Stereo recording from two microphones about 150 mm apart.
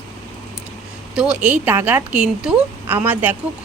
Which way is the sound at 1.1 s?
5° right (ahead or behind).